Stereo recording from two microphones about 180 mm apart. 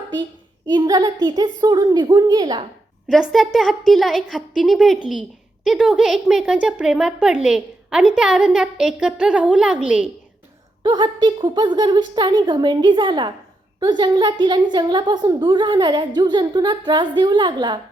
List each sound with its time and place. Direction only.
0.7 s a woman's voice: 25° right (ahead or behind)
3.1 s speech: centre (ahead or behind)
10.8 s a woman's voice: 25° right (ahead or behind)